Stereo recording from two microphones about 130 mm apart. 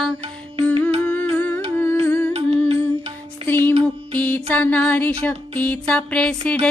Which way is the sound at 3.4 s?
15° left (ahead or behind).